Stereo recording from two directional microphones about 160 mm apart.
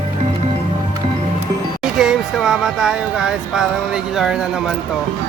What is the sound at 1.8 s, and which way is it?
Music, 5° right (ahead or behind).